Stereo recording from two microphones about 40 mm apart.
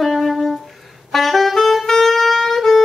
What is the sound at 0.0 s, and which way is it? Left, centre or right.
Music, centre.